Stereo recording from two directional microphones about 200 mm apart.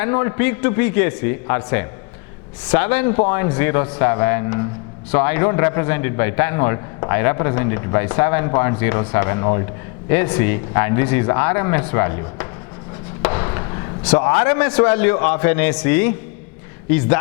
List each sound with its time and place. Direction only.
0.0 s a man's voice: 15° left (ahead or behind)
13.2 s a sound: 15° left (ahead or behind)
14.0 s a man's voice: 10° left (ahead or behind)